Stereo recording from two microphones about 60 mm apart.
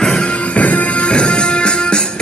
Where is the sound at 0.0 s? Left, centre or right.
Centre.